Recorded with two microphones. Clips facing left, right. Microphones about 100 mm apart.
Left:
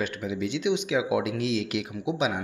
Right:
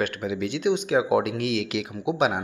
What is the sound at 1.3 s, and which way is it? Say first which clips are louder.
Speech: right 1 dB; 65° right (ahead or behind).